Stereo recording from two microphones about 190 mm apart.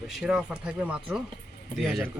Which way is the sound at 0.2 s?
5° right (ahead or behind).